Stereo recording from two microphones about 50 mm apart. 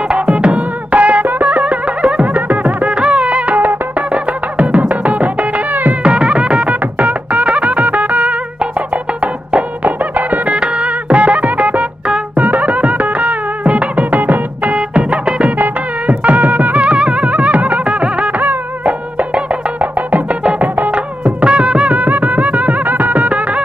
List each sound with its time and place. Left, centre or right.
0.1 s music: right
6.0 s music: right
18.4 s music: right